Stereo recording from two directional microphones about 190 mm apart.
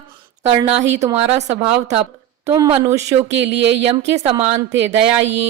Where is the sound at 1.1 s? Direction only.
35° right (ahead or behind).